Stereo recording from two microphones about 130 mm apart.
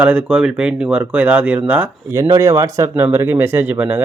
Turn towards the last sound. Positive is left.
turn(degrees=-15)  # may be behind; listen again after turning